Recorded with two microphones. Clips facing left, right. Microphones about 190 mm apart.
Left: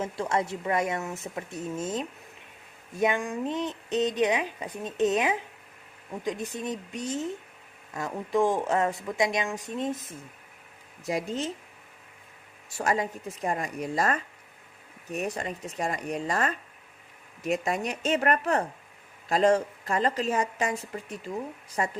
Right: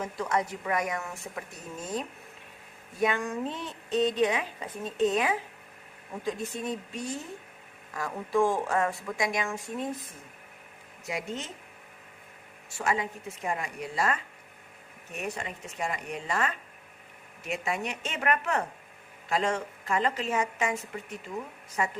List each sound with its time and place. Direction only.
0.0 s a woman's voice: 25° left (ahead or behind)
11.0 s speech: 35° left (ahead or behind)
12.7 s speech: 40° left (ahead or behind)